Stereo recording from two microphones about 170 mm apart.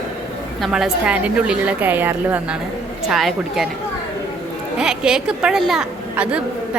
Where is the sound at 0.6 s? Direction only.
Centre (ahead or behind).